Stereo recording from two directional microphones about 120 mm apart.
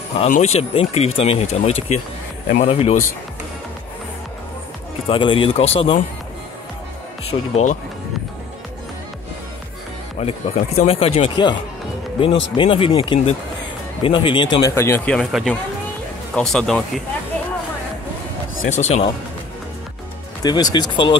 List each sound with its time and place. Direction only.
0.2 s speech: 70° left (ahead or behind)
5.0 s speech: 45° left (ahead or behind)
7.2 s speech: 60° left (ahead or behind)
10.1 s speech: 65° left (ahead or behind); by 14.5 s 45° left (ahead or behind)
14.7 s speech: 20° left (ahead or behind)
15.0 s speech: 5° left (ahead or behind)
18.7 s speech: 70° left (ahead or behind)
20.4 s speech: 35° left (ahead or behind)